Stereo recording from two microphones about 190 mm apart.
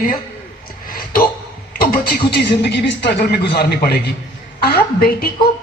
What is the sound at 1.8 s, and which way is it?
Speech, 50° left (ahead or behind).